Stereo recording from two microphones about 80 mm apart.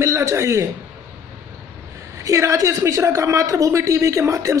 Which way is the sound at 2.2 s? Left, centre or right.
Right.